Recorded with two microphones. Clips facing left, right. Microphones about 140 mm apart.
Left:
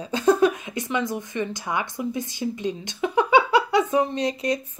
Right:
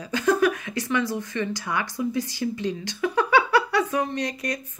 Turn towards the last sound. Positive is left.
turn(degrees=25)  # may be behind; listen again after turning